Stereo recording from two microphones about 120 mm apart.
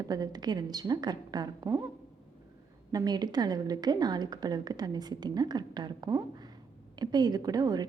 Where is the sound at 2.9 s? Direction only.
35° right (ahead or behind).